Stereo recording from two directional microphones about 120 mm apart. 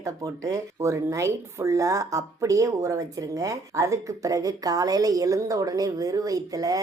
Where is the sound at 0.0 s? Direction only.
25° right (ahead or behind).